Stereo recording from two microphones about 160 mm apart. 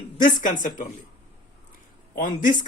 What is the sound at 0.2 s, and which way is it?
Speech, 55° left (ahead or behind).